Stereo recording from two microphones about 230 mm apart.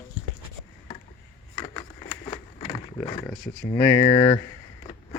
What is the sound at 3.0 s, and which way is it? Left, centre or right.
Speech, centre.